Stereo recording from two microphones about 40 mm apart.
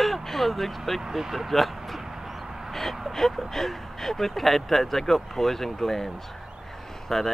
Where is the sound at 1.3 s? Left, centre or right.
Centre.